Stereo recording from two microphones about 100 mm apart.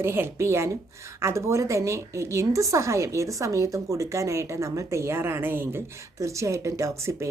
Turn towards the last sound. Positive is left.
turn(degrees=-30)  # may be behind; listen again after turning